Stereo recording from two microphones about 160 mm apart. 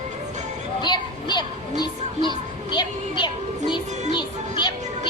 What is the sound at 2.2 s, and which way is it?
Children playing, 30° left (ahead or behind).